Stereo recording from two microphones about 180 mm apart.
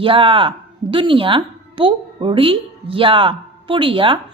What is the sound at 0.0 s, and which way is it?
A woman's voice, 30° right (ahead or behind).